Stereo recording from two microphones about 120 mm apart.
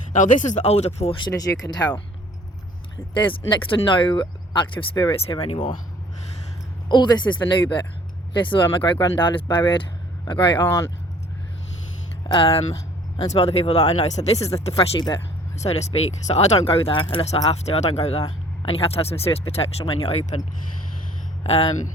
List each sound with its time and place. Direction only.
0.1 s speech: 90° left; by 1.2 s 60° left (ahead or behind)
1.2 s a woman's voice: 30° left (ahead or behind)
3.2 s speech: 45° left (ahead or behind)
6.8 s a woman's voice: 40° left (ahead or behind)
10.6 s speech: 20° left (ahead or behind)
12.3 s speech: 50° left (ahead or behind)
13.2 s speech: 60° left (ahead or behind)
14.9 s a woman's voice: 40° left (ahead or behind)
15.5 s speech: 65° left (ahead or behind)
16.6 s speech: 50° left (ahead or behind)
21.4 s speech: 60° left (ahead or behind)